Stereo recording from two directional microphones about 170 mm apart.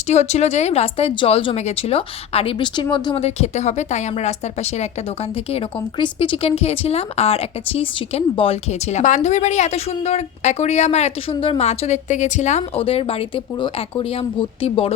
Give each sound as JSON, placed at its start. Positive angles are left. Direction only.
{"t": 0.1, "sound": "speech", "side_deg": 40}
{"t": 3.2, "sound": "speech", "side_deg": 40}